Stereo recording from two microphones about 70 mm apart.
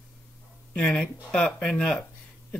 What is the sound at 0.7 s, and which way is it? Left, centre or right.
Speech, centre.